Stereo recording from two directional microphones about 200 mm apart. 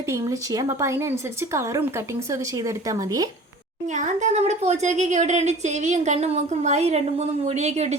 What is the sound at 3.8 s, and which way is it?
Speech, 35° right (ahead or behind).